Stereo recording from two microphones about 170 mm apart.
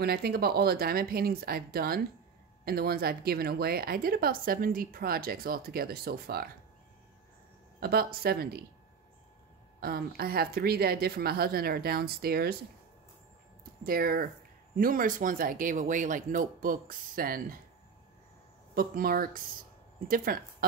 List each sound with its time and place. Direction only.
0.0 s a woman's voice: 65° right (ahead or behind)
7.8 s a woman's voice: 65° right (ahead or behind)
9.8 s a woman's voice: 65° right (ahead or behind)
13.8 s a woman's voice: 60° right (ahead or behind)
18.8 s a woman's voice: 60° right (ahead or behind)
20.3 s a woman's voice: 60° right (ahead or behind)